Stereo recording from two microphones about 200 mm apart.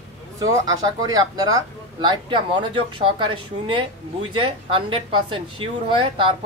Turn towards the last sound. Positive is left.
turn(degrees=-25)  # may be behind; listen again after turning